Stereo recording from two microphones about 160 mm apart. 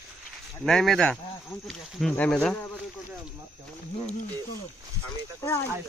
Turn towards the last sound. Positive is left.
turn(degrees=15)  # may be behind; listen again after turning